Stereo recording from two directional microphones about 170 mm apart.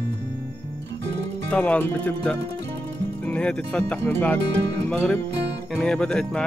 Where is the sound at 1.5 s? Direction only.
10° left (ahead or behind).